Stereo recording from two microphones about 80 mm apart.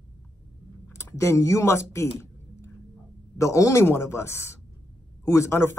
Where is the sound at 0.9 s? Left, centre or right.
Left.